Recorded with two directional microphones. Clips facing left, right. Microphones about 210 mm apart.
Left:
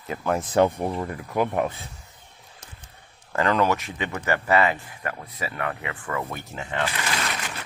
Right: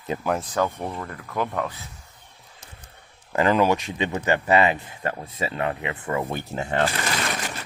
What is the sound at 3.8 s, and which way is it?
Speech, 25° right (ahead or behind).